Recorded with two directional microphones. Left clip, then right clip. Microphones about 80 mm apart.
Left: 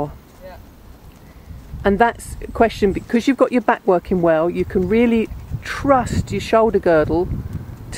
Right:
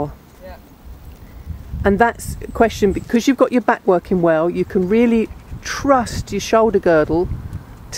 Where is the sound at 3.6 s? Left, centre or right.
Centre.